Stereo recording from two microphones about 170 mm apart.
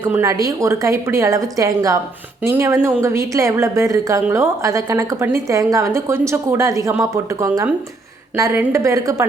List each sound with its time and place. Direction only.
0.0 s a woman's voice: 15° right (ahead or behind)